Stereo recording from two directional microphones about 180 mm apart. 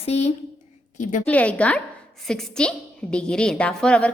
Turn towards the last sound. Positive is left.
turn(degrees=5)  # may be behind; listen again after turning